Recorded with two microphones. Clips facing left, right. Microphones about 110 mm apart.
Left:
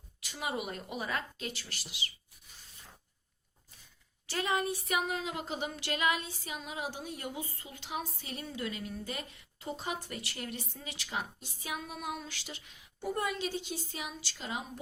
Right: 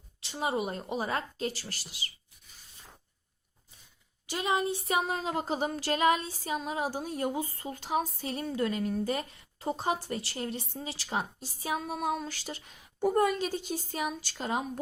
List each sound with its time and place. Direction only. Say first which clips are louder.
0.2 s speech: right 6 dB; 30° right (ahead or behind)
4.3 s speech: right 3 dB; 20° right (ahead or behind); by 14.6 s 45° right (ahead or behind)